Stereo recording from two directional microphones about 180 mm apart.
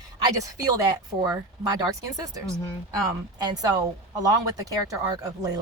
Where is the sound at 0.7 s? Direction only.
20° right (ahead or behind).